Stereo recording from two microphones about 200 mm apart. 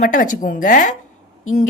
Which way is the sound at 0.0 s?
40° left (ahead or behind).